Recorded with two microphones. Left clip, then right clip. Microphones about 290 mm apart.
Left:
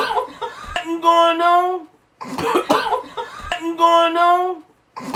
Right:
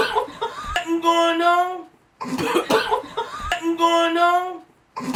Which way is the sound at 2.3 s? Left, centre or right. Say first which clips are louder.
Left 2 dB; centre.